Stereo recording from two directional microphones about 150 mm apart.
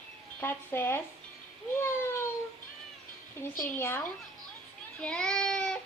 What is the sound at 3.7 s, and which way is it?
A child's voice, 15° left (ahead or behind).